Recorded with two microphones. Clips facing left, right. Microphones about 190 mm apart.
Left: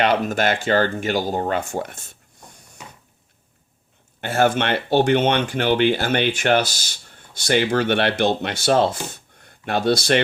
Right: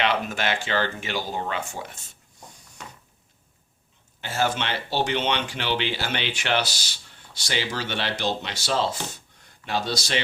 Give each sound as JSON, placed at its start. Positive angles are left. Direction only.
{"t": 0.0, "sound": "speech", "side_deg": 45}
{"t": 4.2, "sound": "speech", "side_deg": 55}
{"t": 9.1, "sound": "a sound", "side_deg": 55}